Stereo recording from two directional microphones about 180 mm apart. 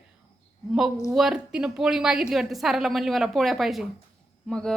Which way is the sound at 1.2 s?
5° right (ahead or behind).